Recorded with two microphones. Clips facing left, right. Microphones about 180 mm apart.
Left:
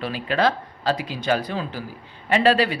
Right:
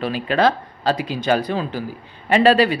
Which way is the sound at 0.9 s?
20° right (ahead or behind).